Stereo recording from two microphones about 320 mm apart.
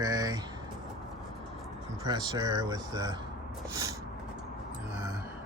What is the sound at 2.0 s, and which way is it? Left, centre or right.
Speech, centre.